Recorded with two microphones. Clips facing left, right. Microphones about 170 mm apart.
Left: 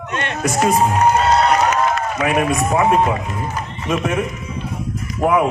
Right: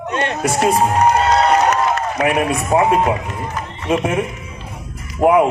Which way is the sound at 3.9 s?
30° right (ahead or behind).